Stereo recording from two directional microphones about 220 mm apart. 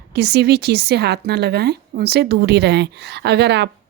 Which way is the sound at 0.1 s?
50° right (ahead or behind).